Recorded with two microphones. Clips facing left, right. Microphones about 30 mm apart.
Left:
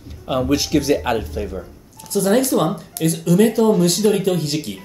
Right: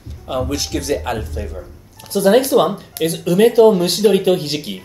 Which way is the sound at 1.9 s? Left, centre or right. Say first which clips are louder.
Right 4 dB; right.